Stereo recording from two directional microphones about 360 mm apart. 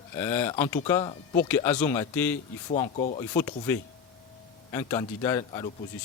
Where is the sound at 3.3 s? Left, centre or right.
Centre.